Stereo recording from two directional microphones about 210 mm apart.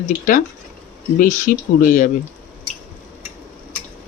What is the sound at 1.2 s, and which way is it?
Speech, 40° left (ahead or behind).